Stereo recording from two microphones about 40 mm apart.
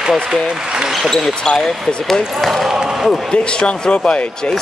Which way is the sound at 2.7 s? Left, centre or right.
Centre.